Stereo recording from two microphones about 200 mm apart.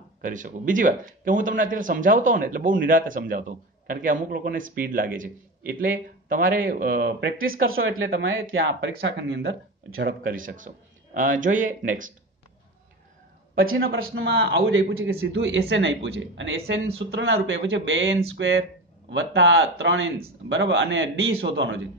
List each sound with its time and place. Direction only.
0.2 s a man's voice: 40° right (ahead or behind)
7.6 s speech: 90° right
8.2 s speech: 75° right (ahead or behind)
8.6 s speech: 65° right (ahead or behind)
10.2 s a man's voice: 45° right (ahead or behind)
13.6 s a man's voice: 45° right (ahead or behind); by 21.8 s 65° right (ahead or behind)